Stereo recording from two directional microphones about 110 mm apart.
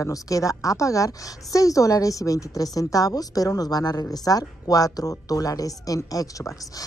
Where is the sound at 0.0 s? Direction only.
30° left (ahead or behind).